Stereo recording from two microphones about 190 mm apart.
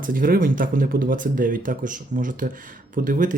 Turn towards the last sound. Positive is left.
turn(degrees=-45)  # may be behind; listen again after turning